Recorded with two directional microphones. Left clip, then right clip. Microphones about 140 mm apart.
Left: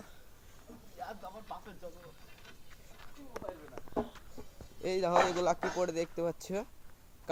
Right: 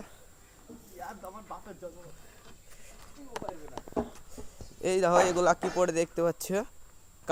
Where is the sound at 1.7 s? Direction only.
15° left (ahead or behind).